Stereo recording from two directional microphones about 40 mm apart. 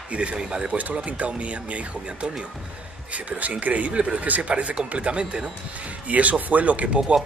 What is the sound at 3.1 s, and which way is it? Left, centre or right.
Speech, right.